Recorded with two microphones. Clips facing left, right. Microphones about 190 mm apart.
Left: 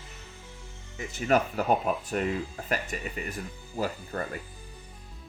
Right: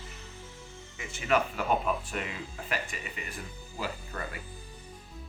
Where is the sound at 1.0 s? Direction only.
40° left (ahead or behind).